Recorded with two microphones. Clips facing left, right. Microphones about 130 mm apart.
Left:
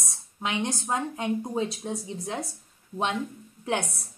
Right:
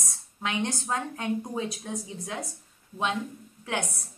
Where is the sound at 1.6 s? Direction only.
30° left (ahead or behind).